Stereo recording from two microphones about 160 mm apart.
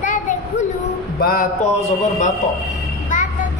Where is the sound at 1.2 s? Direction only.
70° left (ahead or behind).